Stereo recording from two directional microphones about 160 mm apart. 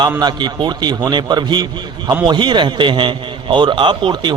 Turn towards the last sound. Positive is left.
turn(degrees=-30)  # may be behind; listen again after turning